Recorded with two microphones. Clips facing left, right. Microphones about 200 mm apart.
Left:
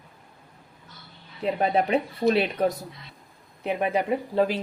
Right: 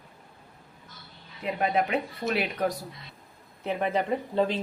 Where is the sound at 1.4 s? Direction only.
30° left (ahead or behind).